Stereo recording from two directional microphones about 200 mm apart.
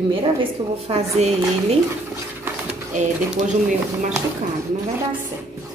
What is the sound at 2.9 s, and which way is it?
Speech, 35° right (ahead or behind).